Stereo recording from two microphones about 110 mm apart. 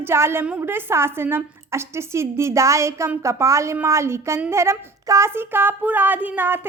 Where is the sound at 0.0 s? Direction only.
25° right (ahead or behind).